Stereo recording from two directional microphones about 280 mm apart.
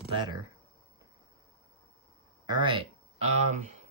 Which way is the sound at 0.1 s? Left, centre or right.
Centre.